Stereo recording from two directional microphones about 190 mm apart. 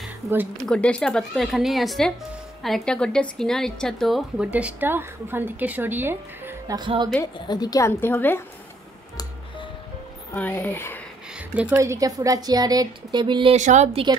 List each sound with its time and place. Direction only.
0.7 s a woman's voice: 5° left (ahead or behind); by 6.8 s 10° right (ahead or behind)
6.8 s a woman's voice: 25° right (ahead or behind)
7.3 s a woman's voice: 20° left (ahead or behind)
10.3 s a woman's voice: 10° left (ahead or behind)
11.5 s a woman's voice: 10° right (ahead or behind)
13.6 s speech: 40° right (ahead or behind)